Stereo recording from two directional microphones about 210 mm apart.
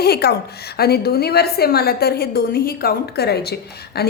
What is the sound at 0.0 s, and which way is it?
A woman's voice, 50° left (ahead or behind).